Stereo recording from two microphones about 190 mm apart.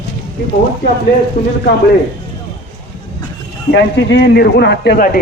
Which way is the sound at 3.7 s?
70° left (ahead or behind).